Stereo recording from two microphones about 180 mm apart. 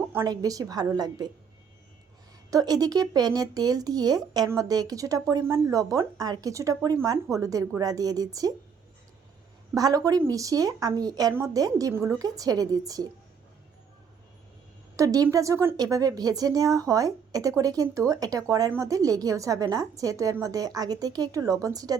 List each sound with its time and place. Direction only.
0.1 s a woman's voice: 15° right (ahead or behind)
2.5 s a woman's voice: 20° right (ahead or behind)
9.7 s a woman's voice: 20° right (ahead or behind)
14.9 s a woman's voice: 20° right (ahead or behind)